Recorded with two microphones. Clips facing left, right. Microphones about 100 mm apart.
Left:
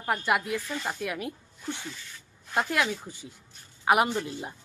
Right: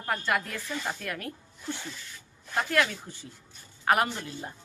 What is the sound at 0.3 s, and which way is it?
Speech, 10° left (ahead or behind).